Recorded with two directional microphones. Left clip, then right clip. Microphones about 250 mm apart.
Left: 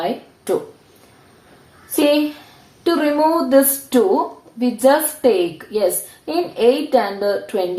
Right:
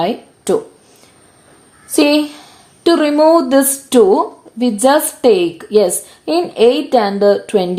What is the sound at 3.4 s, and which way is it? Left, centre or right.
Speech, right.